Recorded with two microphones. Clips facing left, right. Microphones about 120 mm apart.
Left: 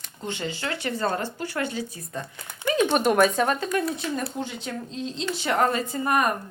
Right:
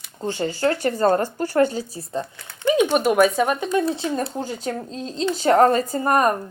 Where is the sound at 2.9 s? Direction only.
5° right (ahead or behind).